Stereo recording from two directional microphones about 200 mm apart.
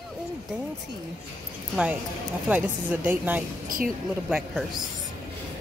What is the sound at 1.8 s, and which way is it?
A woman's voice, 5° right (ahead or behind).